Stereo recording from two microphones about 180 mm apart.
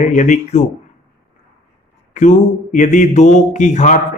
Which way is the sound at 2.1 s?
40° left (ahead or behind).